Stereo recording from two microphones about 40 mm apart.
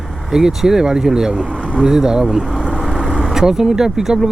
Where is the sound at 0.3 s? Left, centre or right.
Centre.